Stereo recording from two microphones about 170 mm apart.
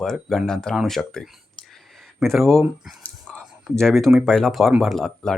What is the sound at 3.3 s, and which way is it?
Whispering, 5° left (ahead or behind).